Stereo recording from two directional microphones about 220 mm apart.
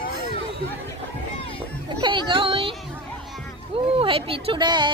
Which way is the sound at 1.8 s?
20° right (ahead or behind).